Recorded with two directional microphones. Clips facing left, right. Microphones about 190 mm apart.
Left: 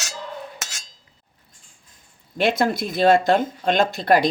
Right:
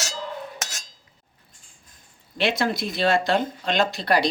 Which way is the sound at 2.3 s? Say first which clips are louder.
Left 3 dB; 50° left (ahead or behind).